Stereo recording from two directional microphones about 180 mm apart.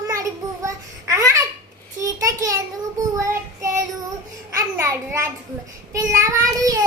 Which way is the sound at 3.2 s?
15° right (ahead or behind).